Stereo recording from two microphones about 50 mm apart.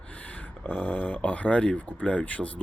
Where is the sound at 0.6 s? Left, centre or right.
Left.